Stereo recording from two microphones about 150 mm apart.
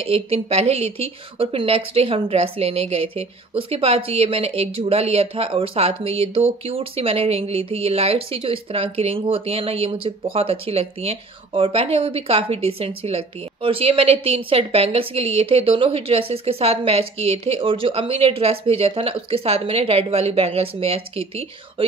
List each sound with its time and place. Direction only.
0.0 s a woman's voice: 40° right (ahead or behind)